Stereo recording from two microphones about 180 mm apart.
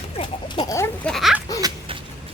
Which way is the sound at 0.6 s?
15° left (ahead or behind).